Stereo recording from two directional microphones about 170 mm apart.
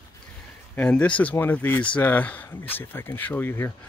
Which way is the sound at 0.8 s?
10° left (ahead or behind).